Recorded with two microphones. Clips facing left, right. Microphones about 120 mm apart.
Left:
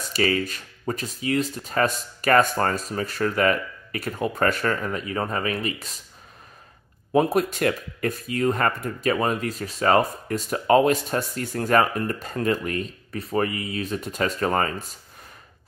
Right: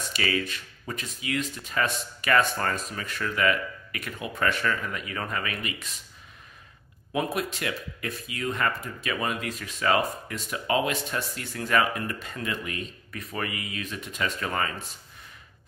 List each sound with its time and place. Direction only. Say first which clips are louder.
0.0 s speech: left 5 dB; 40° left (ahead or behind)
7.1 s speech: left 8 dB; 40° left (ahead or behind)